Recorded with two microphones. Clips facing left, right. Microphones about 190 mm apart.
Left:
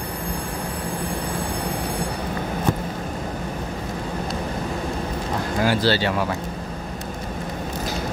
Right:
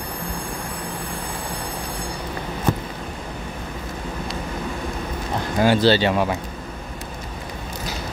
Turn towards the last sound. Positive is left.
turn(degrees=-20)  # may be behind; listen again after turning